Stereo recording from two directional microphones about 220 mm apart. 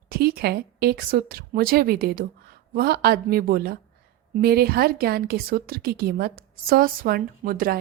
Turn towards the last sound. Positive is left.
turn(degrees=-40)  # may be behind; listen again after turning